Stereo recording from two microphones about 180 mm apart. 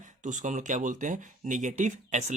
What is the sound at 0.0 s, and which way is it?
Speech, 45° right (ahead or behind).